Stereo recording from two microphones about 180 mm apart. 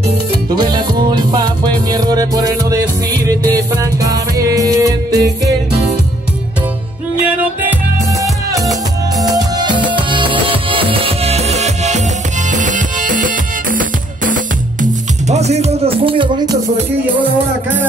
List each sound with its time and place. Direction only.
0.6 s music: 25° right (ahead or behind)
9.1 s music: 20° right (ahead or behind)
17.0 s music: 10° right (ahead or behind)